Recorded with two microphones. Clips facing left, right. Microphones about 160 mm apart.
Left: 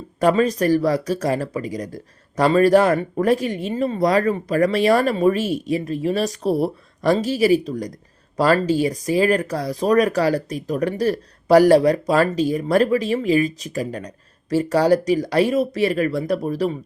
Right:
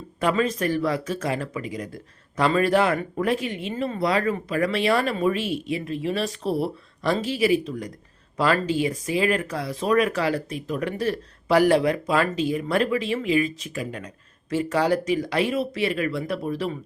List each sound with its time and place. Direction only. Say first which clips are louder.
0.2 s speech: left 6 dB; 40° left (ahead or behind)